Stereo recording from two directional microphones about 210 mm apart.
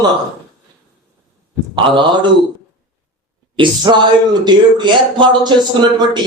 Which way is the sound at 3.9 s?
20° right (ahead or behind).